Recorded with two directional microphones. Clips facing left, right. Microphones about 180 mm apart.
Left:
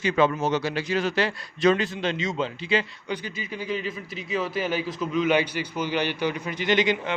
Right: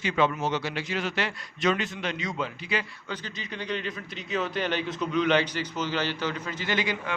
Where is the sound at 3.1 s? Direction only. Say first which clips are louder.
Left 5 dB; 10° left (ahead or behind).